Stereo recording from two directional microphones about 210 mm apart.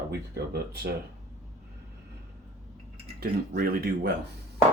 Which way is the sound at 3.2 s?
45° right (ahead or behind).